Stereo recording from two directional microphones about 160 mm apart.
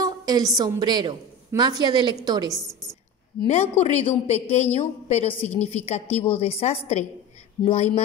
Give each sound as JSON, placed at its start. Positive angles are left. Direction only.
{"t": 0.0, "sound": "a woman's voice", "side_deg": -25}
{"t": 3.4, "sound": "a woman's voice", "side_deg": 40}
{"t": 5.4, "sound": "a woman's voice", "side_deg": 10}
{"t": 5.7, "sound": "a woman's voice", "side_deg": 40}